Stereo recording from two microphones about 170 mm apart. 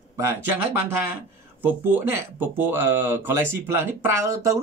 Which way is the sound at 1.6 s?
10° right (ahead or behind).